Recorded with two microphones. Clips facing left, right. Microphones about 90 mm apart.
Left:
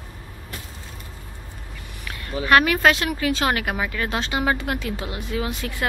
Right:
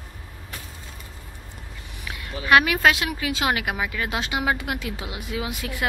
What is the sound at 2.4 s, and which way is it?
Speech, 5° right (ahead or behind).